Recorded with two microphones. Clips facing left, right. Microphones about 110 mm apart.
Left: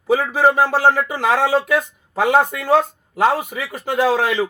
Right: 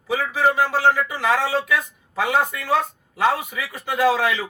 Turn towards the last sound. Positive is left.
turn(degrees=35)  # may be behind; listen again after turning